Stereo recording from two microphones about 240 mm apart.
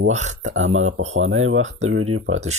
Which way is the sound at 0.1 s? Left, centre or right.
Right.